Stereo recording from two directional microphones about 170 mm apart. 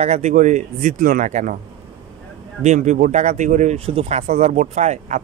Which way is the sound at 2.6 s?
45° right (ahead or behind).